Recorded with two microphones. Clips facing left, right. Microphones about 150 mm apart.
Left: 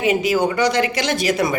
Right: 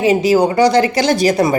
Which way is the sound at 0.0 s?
35° right (ahead or behind).